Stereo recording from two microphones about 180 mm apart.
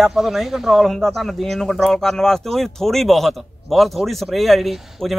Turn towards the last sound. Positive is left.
turn(degrees=0)  # may be behind; listen again after turning